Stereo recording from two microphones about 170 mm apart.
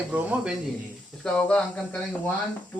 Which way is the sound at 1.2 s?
5° left (ahead or behind).